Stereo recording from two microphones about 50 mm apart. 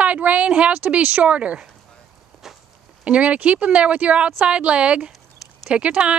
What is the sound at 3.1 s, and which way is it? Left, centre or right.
Speech, right.